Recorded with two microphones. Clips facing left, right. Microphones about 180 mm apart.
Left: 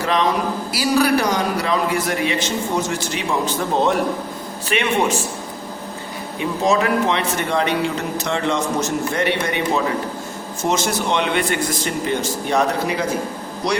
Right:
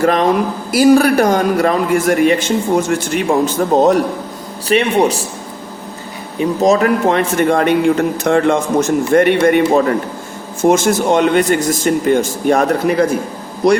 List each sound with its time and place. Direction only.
0.0 s a man's voice: 50° right (ahead or behind)
6.4 s a man's voice: 40° right (ahead or behind)